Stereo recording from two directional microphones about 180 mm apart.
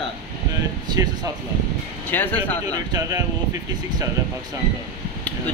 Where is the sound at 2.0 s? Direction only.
10° left (ahead or behind).